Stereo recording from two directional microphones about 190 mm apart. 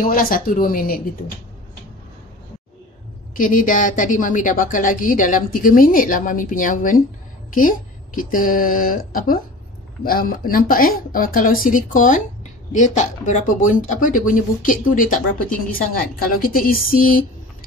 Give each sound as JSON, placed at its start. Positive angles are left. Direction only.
{"t": 0.0, "sound": "a woman's voice", "side_deg": 50}
{"t": 3.3, "sound": "a woman's voice", "side_deg": 45}